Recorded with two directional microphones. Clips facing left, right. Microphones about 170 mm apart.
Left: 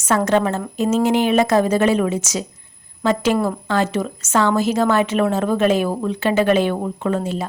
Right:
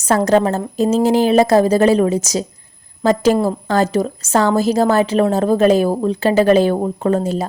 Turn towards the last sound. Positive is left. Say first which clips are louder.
# right 4 dB
turn(degrees=-40)  # may be behind; listen again after turning